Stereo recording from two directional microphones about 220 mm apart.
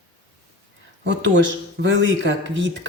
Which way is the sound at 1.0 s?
55° right (ahead or behind).